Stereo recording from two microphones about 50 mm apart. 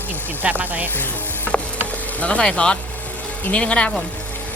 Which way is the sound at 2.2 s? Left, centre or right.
Left.